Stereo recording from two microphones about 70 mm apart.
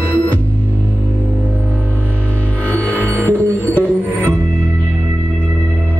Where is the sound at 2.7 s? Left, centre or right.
Left.